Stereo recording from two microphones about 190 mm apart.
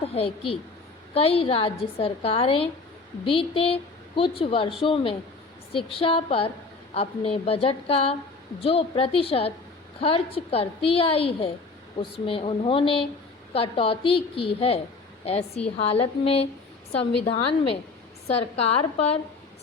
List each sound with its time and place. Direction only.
0.0 s a woman's voice: 30° left (ahead or behind)